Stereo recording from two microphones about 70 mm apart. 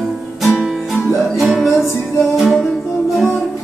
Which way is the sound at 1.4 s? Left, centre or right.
Centre.